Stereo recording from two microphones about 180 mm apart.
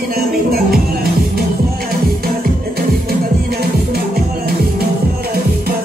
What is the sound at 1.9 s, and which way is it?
Music, 55° right (ahead or behind).